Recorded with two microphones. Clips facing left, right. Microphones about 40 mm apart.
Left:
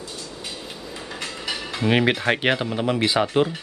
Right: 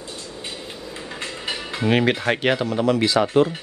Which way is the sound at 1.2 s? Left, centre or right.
Centre.